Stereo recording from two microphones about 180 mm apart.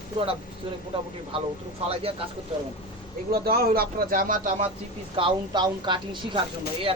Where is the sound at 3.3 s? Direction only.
60° right (ahead or behind); by 4.7 s 40° right (ahead or behind).